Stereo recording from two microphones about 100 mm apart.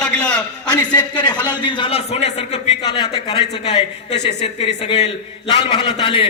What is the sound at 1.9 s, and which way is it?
Speech, 85° left.